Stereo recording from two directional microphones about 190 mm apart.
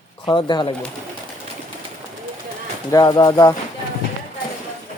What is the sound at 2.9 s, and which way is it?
Speech, 20° left (ahead or behind).